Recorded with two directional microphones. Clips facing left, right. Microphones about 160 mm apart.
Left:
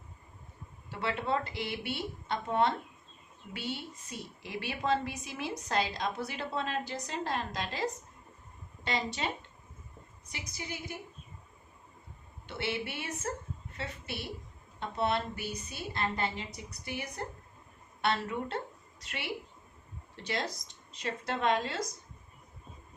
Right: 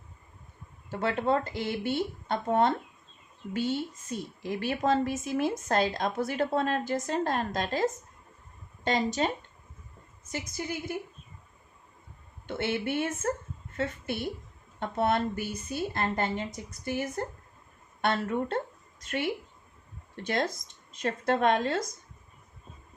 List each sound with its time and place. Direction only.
0.9 s a woman's voice: 45° right (ahead or behind)
12.5 s a woman's voice: 50° right (ahead or behind)